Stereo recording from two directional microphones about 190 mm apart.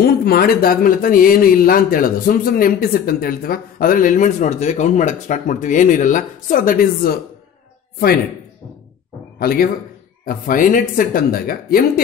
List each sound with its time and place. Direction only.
0.0 s speech: 55° left (ahead or behind)
9.4 s speech: 50° left (ahead or behind)